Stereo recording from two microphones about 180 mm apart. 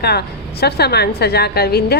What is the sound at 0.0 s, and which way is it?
A woman's voice, 65° left (ahead or behind).